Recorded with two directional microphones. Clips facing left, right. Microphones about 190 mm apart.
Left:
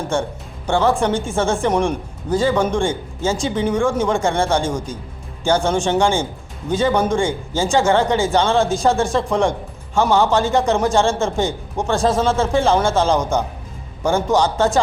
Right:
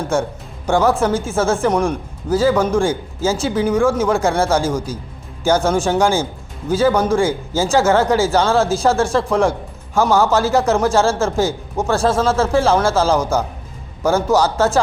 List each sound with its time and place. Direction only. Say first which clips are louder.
0.7 s speech: right 2 dB; 10° right (ahead or behind)